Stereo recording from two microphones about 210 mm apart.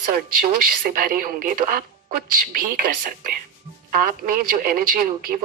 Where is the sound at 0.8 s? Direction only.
40° right (ahead or behind).